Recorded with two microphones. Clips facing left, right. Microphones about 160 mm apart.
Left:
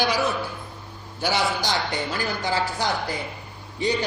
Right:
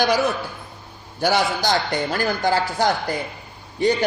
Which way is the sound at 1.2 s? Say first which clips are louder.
Right 4 dB; 45° right (ahead or behind).